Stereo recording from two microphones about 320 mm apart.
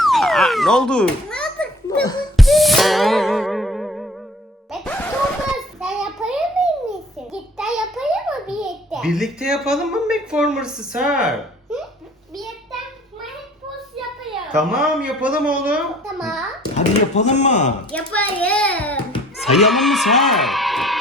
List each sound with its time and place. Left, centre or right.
0.0 s children playing: centre
1.9 s a sound: centre
2.3 s music: centre
4.7 s a sound: centre
12.3 s child singing: centre
14.8 s a child's voice: centre
16.7 s speech: left
17.9 s a child's voice: centre